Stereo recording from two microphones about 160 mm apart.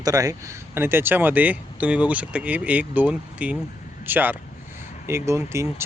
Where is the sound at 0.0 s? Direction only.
20° right (ahead or behind).